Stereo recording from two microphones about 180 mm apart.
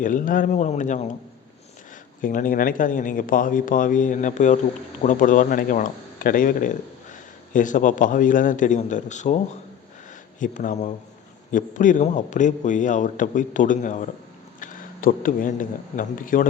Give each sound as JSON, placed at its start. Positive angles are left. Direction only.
{"t": 0.0, "sound": "speech", "side_deg": 50}
{"t": 2.2, "sound": "speech", "side_deg": 50}
{"t": 10.4, "sound": "speech", "side_deg": 45}